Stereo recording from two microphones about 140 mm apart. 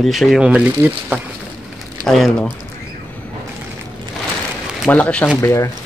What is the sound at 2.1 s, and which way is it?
Speech, centre (ahead or behind).